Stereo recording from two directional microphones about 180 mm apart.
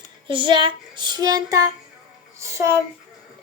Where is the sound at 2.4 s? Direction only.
15° right (ahead or behind).